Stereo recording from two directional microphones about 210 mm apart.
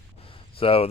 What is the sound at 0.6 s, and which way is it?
Speech, 25° left (ahead or behind).